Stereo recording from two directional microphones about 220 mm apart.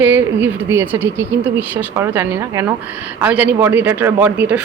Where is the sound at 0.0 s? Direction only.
10° right (ahead or behind).